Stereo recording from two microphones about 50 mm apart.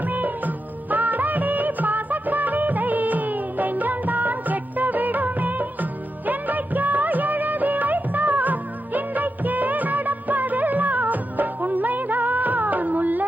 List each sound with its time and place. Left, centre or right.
0.1 s music of bollywood: right